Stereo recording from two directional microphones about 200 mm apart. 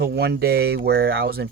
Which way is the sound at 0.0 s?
55° right (ahead or behind).